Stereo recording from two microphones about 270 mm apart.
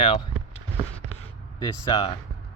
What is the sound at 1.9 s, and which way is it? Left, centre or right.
Speech, centre.